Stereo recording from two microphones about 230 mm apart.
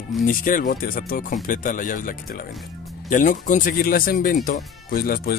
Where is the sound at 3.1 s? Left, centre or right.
Left.